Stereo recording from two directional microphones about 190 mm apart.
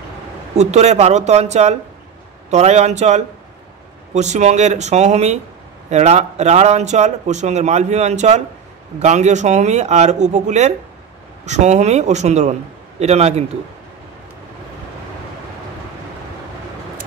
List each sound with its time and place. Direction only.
0.6 s a man's voice: 35° right (ahead or behind)